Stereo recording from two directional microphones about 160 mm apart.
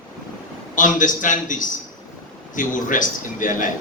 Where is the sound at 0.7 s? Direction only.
55° left (ahead or behind).